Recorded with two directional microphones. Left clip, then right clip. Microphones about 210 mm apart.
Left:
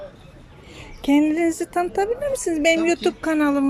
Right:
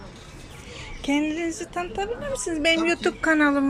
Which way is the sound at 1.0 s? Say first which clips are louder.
Left 6 dB; 20° left (ahead or behind).